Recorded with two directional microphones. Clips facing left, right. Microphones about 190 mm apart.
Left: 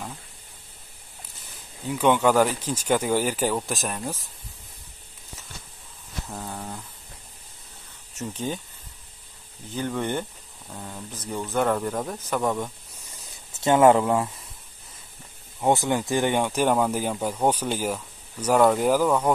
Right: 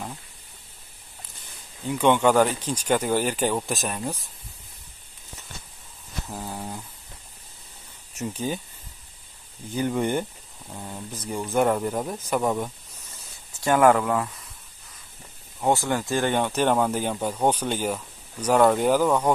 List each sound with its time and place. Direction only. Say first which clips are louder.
1.9 s speech: right 1 dB; 5° left (ahead or behind)
6.2 s speech: right 1 dB; 5° right (ahead or behind)
8.2 s speech: right 1 dB; 10° right (ahead or behind)
9.8 s speech: right 3 dB; 10° right (ahead or behind)
13.5 s speech: left 2 dB; 20° left (ahead or behind)
15.7 s speech: left 1 dB; 20° left (ahead or behind)